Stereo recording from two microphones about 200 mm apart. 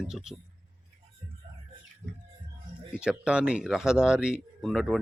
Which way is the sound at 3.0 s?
5° right (ahead or behind).